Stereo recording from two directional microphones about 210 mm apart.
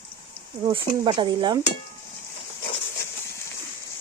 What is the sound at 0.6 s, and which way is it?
Speech, 20° right (ahead or behind).